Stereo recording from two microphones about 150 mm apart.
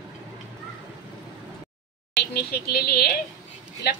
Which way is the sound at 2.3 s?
90° left.